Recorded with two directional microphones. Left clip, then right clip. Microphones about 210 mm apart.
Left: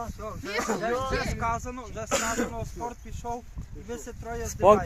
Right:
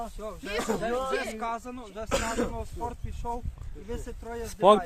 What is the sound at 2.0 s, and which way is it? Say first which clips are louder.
Speech: left 1 dB; 50° left (ahead or behind).